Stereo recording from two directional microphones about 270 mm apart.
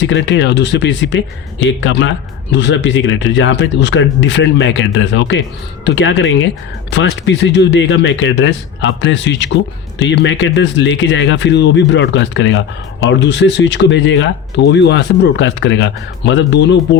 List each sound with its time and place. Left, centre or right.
0.0 s speech: left